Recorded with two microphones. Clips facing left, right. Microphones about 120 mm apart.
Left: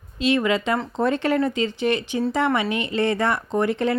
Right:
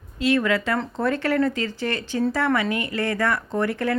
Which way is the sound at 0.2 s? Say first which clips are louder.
Even; 20° left (ahead or behind).